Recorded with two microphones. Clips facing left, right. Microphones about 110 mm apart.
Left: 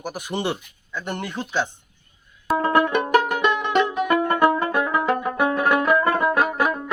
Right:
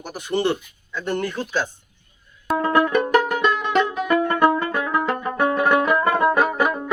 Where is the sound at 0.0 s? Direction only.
15° left (ahead or behind).